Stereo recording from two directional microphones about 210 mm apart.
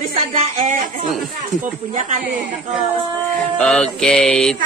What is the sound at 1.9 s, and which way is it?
Speech, 40° right (ahead or behind).